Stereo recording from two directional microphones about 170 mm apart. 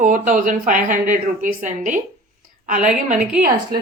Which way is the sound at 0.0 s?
50° right (ahead or behind).